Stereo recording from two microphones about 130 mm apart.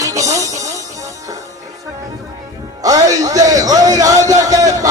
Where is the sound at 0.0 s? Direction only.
25° right (ahead or behind).